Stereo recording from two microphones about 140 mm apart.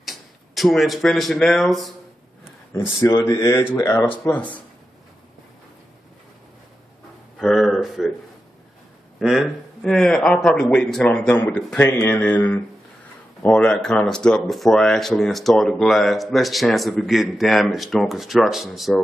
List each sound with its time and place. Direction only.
0.0 s speech: centre (ahead or behind)
2.7 s speech: 20° left (ahead or behind)
7.3 s speech: centre (ahead or behind)
9.2 s speech: centre (ahead or behind)